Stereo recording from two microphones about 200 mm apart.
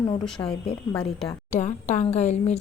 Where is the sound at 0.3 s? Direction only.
5° left (ahead or behind).